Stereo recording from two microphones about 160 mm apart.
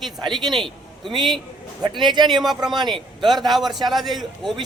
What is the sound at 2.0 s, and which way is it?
Speech, 25° right (ahead or behind).